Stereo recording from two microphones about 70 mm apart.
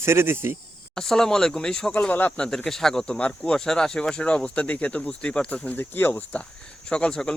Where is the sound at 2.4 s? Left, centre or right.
Centre.